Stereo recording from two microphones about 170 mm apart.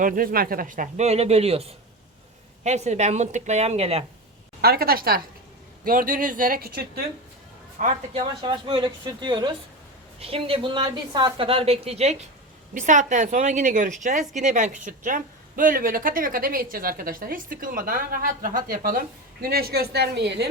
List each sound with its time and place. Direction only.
0.0 s a woman's voice: 55° right (ahead or behind); by 4.0 s 35° right (ahead or behind)
4.6 s a woman's voice: 65° right (ahead or behind)
7.8 s a woman's voice: 35° right (ahead or behind); by 20.5 s 90° right